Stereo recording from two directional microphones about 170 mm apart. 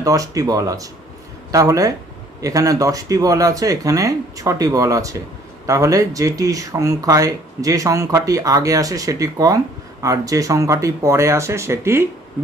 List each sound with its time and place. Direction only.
0.0 s speech: 20° right (ahead or behind)